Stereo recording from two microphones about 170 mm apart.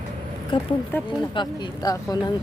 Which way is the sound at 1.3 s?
25° left (ahead or behind).